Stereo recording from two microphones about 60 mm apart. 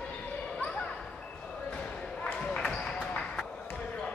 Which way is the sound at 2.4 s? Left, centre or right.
Centre.